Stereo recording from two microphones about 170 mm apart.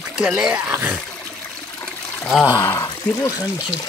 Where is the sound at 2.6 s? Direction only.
20° left (ahead or behind).